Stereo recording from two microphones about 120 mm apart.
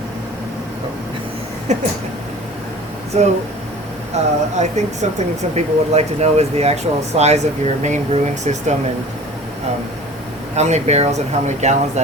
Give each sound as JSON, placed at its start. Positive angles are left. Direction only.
{"t": 1.7, "sound": "speech", "side_deg": -70}
{"t": 3.1, "sound": "speech", "side_deg": -65}
{"t": 10.5, "sound": "speech", "side_deg": -65}